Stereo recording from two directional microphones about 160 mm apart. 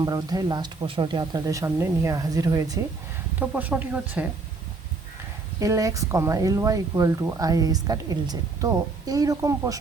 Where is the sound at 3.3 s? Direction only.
10° right (ahead or behind).